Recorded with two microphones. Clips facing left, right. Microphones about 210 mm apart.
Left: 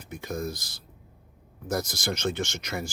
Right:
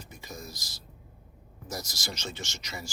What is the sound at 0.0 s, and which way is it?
Speech, 55° left (ahead or behind).